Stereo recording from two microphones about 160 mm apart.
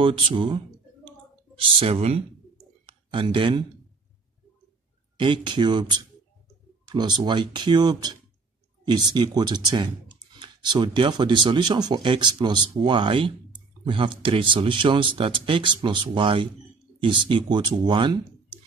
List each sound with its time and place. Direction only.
0.0 s speech: 30° right (ahead or behind)
1.6 s speech: 35° right (ahead or behind)
5.2 s speech: 30° right (ahead or behind)